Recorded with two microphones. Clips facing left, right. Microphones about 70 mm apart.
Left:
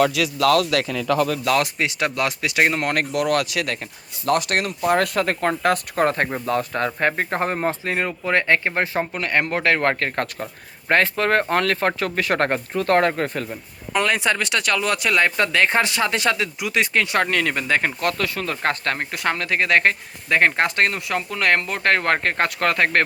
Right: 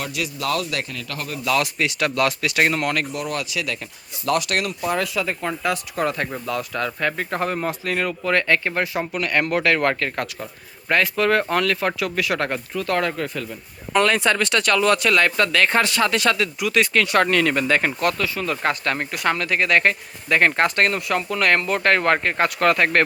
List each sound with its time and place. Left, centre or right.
0.1 s a man's voice: left
1.5 s speech: left; by 2.8 s centre
2.9 s speech: left
3.2 s speech: left
4.3 s speech: left
4.9 s speech: left
13.9 s speech: centre
18.4 s speech: left